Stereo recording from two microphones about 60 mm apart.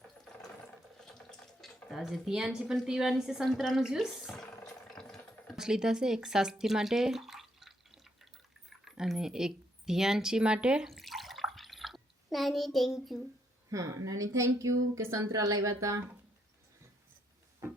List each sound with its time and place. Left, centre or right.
0.9 s a sound: centre
2.0 s a woman's voice: centre
4.1 s a woman's voice: centre
4.9 s rattle: centre
5.5 s drip: centre
8.8 s speech: centre
10.8 s bathtub: centre
13.7 s speech: right